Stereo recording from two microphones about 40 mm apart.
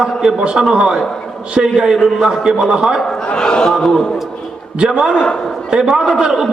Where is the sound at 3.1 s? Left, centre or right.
Centre.